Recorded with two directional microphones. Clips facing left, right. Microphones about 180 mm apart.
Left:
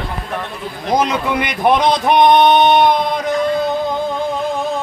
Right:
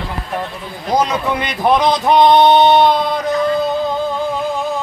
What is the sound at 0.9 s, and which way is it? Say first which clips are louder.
A man's voice: even; 15° left (ahead or behind).